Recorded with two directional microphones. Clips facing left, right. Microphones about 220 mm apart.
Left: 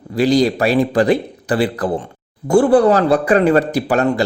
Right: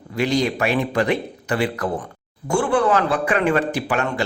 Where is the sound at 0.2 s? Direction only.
35° left (ahead or behind).